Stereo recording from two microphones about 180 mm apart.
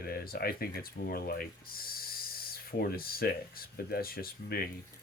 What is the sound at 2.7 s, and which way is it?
Speech, 55° left (ahead or behind).